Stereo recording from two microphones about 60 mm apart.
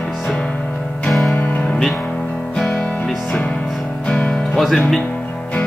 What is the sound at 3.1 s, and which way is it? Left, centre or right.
Music, centre.